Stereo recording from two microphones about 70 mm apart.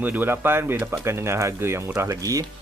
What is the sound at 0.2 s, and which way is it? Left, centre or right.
Speech, right.